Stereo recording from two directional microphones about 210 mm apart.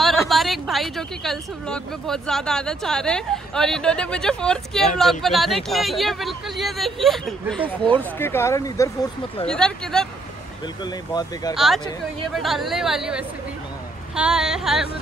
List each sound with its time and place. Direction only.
0.3 s speech: centre (ahead or behind); by 9.1 s 15° left (ahead or behind)
9.5 s speech: 5° left (ahead or behind)
10.8 s speech: 20° left (ahead or behind)
11.5 s speech: centre (ahead or behind)